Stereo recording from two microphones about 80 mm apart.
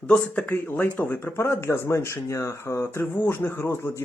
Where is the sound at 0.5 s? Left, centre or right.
Left.